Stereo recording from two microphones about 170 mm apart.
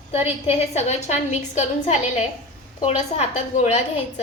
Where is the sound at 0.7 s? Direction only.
40° left (ahead or behind).